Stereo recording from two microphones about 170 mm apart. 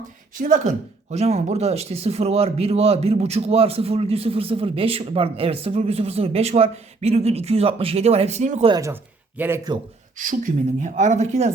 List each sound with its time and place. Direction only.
0.3 s speech: 50° right (ahead or behind)
8.7 s speech: 20° right (ahead or behind)
10.2 s speech: 50° right (ahead or behind)